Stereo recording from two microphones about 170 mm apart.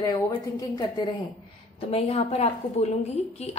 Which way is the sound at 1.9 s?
35° left (ahead or behind).